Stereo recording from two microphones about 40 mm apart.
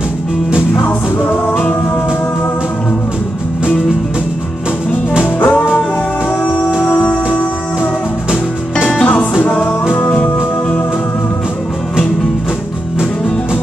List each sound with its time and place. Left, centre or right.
5.4 s music: left
9.0 s music: left